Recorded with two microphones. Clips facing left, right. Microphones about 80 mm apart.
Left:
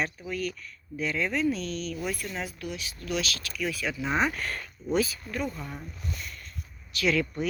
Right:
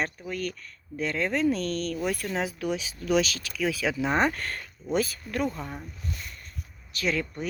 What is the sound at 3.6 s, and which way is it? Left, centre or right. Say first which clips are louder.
Speech: right 4 dB; right.